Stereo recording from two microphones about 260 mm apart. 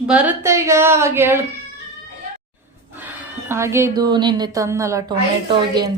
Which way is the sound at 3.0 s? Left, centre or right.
Centre.